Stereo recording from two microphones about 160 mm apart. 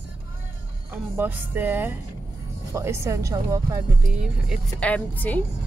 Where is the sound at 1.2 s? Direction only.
10° right (ahead or behind).